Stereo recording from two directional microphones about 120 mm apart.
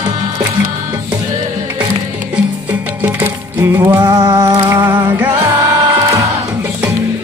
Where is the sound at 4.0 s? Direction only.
35° right (ahead or behind).